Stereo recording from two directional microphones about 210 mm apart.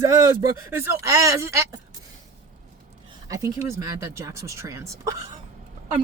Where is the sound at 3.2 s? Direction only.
15° right (ahead or behind).